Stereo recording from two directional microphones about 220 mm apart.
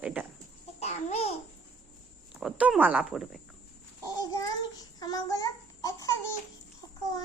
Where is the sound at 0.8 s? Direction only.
30° left (ahead or behind).